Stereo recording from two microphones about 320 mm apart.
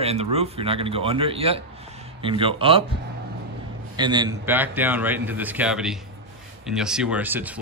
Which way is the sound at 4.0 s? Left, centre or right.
Centre.